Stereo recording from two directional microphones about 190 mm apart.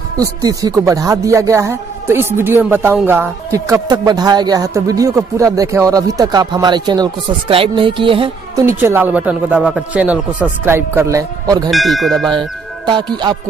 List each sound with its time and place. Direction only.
0.2 s speech: 20° right (ahead or behind)
8.6 s speech: 10° right (ahead or behind)
11.7 s speech: centre (ahead or behind)
12.8 s music: 25° right (ahead or behind)